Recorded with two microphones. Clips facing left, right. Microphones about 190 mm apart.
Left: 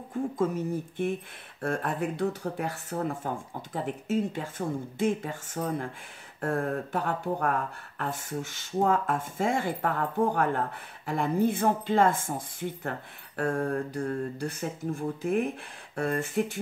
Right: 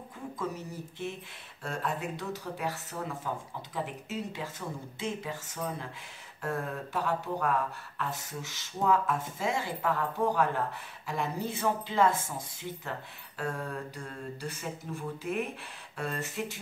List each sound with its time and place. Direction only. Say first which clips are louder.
0.1 s speech: left 9 dB; 50° left (ahead or behind)